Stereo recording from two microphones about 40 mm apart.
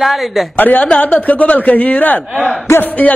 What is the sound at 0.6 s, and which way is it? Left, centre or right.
A man's voice, left.